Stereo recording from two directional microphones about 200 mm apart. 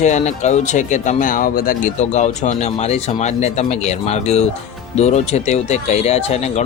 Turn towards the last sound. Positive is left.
turn(degrees=35)  # may be behind; listen again after turning